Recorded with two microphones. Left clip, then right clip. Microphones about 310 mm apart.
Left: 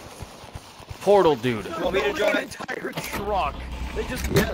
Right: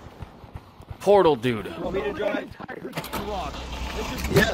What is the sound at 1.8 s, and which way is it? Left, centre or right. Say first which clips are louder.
Speech: left 5 dB; left.